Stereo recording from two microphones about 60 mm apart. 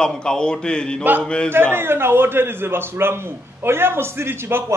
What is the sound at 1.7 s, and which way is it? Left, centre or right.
A man's voice, right.